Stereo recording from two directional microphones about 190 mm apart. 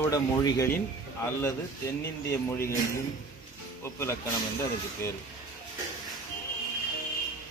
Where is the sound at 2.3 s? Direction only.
15° left (ahead or behind).